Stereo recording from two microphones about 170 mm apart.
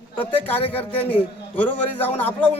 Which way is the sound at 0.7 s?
10° left (ahead or behind).